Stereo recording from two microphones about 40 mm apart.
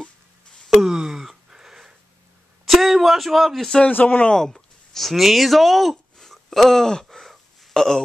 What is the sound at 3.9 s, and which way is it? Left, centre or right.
Speech, left.